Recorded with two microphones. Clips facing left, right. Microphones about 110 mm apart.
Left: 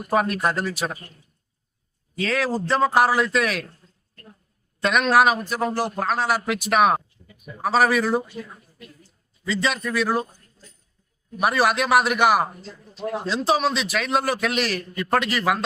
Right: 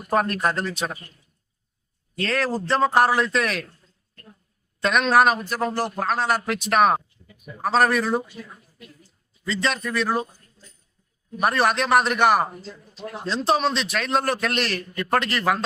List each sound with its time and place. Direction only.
0.1 s a man's voice: 5° left (ahead or behind)
2.1 s a man's voice: centre (ahead or behind)
4.8 s a man's voice: centre (ahead or behind)
9.5 s a man's voice: 5° left (ahead or behind)
11.3 s a man's voice: 5° left (ahead or behind)